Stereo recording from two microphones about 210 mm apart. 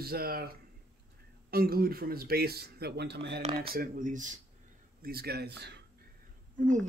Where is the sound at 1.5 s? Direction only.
45° right (ahead or behind).